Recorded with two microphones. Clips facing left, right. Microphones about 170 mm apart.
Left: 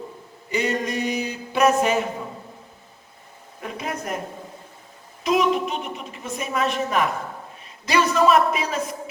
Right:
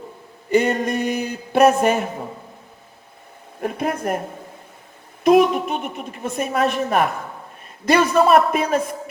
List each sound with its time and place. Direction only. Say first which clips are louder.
0.5 s a woman's voice: right 6 dB; 55° right (ahead or behind)
3.6 s a woman's voice: right 7 dB; 55° right (ahead or behind)
5.2 s a woman's voice: right 6 dB; 55° right (ahead or behind)
7.9 s a woman's voice: right 3 dB; 55° right (ahead or behind)